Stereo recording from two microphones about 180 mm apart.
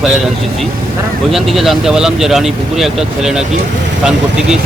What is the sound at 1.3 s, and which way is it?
Speech, centre (ahead or behind).